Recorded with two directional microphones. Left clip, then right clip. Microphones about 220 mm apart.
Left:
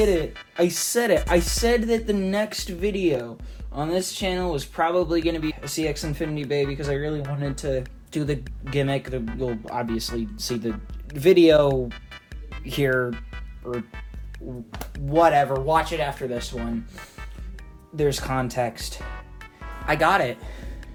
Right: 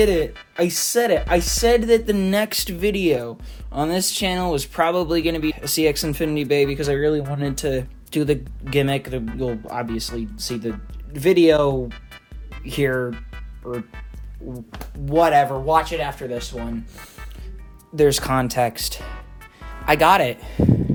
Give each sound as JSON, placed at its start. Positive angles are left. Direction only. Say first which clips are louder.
{"t": 0.2, "sound": "speech", "louder": "right 2 dB", "side_deg": 0}
{"t": 2.0, "sound": "speech", "louder": "right 4 dB", "side_deg": -30}
{"t": 5.4, "sound": "speech", "louder": "right 5 dB", "side_deg": 0}
{"t": 5.7, "sound": "speech", "louder": "right 9 dB", "side_deg": -40}
{"t": 9.6, "sound": "speech", "louder": "right 1 dB", "side_deg": -10}
{"t": 12.6, "sound": "speech", "louder": "right 1 dB", "side_deg": -10}
{"t": 13.1, "sound": "music", "louder": "right 1 dB", "side_deg": 0}
{"t": 15.2, "sound": "speech", "louder": "right 2 dB", "side_deg": -20}
{"t": 15.5, "sound": "speech", "louder": "right 3 dB", "side_deg": -5}
{"t": 17.9, "sound": "speech", "louder": "right 6 dB", "side_deg": -40}
{"t": 19.0, "sound": "music", "louder": "right 1 dB", "side_deg": 0}
{"t": 19.8, "sound": "speech", "louder": "right 5 dB", "side_deg": -30}